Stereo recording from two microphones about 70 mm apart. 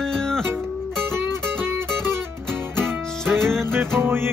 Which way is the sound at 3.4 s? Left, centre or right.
Centre.